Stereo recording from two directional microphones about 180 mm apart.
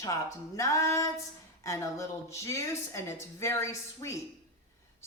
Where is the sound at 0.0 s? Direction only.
15° left (ahead or behind).